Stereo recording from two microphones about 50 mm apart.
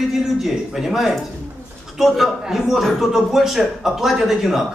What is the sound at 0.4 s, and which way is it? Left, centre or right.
Speech, centre.